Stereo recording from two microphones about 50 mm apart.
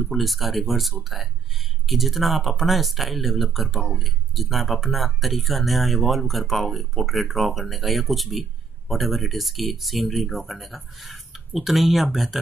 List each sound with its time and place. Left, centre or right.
0.0 s speech: centre